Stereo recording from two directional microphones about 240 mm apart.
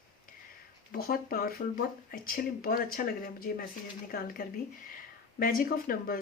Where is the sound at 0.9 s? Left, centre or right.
Left.